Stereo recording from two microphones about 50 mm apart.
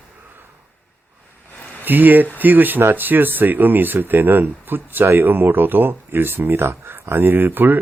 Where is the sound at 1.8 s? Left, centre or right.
Right.